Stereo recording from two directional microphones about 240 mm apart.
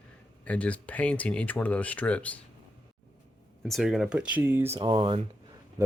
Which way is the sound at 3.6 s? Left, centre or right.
Centre.